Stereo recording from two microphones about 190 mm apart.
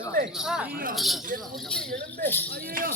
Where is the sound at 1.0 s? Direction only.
Centre (ahead or behind).